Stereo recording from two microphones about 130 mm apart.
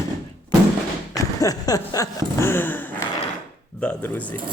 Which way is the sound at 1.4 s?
30° left (ahead or behind).